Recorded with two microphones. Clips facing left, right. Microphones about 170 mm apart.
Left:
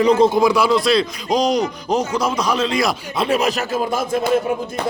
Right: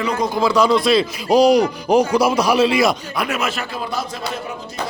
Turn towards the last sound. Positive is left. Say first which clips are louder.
# left 6 dB
turn(degrees=50)  # may be behind; listen again after turning